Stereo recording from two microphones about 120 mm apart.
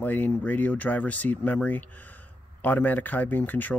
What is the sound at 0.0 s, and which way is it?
Speech, 15° left (ahead or behind).